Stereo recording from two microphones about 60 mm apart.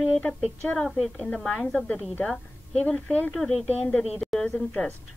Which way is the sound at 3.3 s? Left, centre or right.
Centre.